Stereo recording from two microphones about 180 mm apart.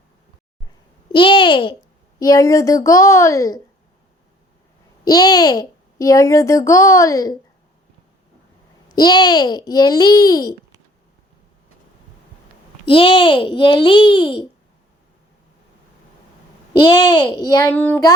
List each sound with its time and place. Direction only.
1.1 s a child's voice: 25° left (ahead or behind)
5.0 s a child's voice: 20° left (ahead or behind)
9.0 s a child's voice: 25° left (ahead or behind)
12.8 s a child's voice: 30° left (ahead or behind)
16.8 s a child's voice: 25° left (ahead or behind)
17.7 s a child's voice: 10° left (ahead or behind)